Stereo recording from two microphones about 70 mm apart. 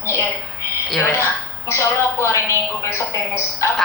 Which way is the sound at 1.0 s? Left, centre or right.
Left.